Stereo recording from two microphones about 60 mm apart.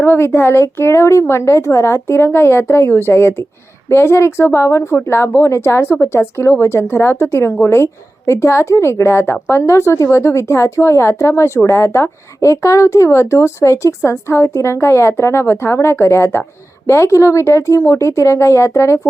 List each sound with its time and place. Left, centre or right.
0.0 s speech: left